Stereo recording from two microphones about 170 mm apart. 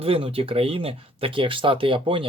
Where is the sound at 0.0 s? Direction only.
35° right (ahead or behind).